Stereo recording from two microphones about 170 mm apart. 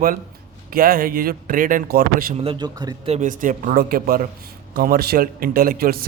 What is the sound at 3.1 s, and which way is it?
A man's voice, 50° right (ahead or behind).